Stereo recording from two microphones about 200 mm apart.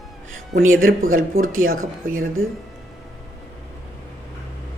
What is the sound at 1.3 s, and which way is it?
Speech, 90° right.